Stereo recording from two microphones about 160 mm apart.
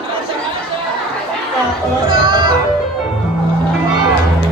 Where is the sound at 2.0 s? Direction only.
30° right (ahead or behind).